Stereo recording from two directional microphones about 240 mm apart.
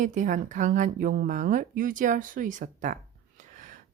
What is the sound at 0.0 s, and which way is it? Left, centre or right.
Speech, right.